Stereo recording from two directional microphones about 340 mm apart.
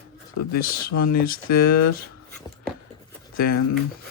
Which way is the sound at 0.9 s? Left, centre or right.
Left.